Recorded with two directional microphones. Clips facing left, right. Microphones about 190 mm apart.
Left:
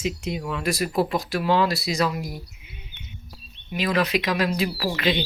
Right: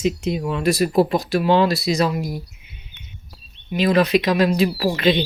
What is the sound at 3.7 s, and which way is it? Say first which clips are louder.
Speech: right 6 dB; 30° right (ahead or behind).